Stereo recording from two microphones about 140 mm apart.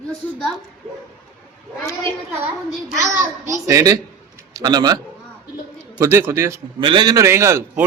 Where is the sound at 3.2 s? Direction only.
20° right (ahead or behind).